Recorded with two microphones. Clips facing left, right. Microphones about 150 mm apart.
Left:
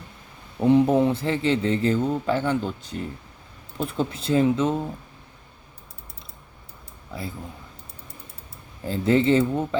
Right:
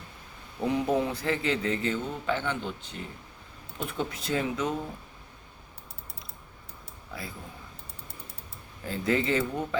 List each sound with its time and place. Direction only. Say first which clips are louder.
0.6 s speech: left 9 dB; 30° left (ahead or behind)
7.1 s speech: left 6 dB; 25° left (ahead or behind)
8.8 s speech: left 7 dB; 30° left (ahead or behind)